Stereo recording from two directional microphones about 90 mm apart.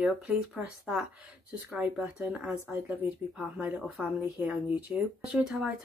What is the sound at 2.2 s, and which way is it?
Speech, 15° right (ahead or behind).